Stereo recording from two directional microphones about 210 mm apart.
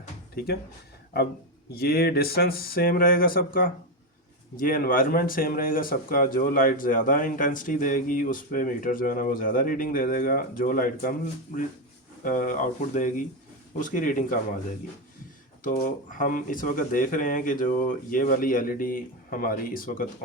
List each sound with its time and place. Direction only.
0.3 s speech: 45° left (ahead or behind)
1.7 s speech: 45° left (ahead or behind)
15.6 s speech: 40° left (ahead or behind)